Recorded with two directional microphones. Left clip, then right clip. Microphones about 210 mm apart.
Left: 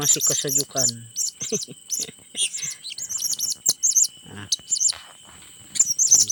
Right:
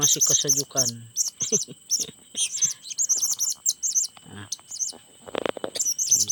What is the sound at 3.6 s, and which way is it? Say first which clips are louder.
Chirp: left 7 dB; 55° right (ahead or behind).